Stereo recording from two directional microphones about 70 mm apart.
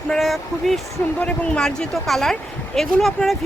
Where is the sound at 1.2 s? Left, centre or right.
Centre.